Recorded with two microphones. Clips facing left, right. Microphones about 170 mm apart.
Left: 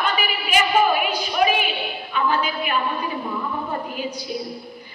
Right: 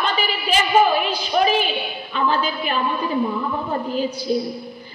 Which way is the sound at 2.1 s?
35° right (ahead or behind).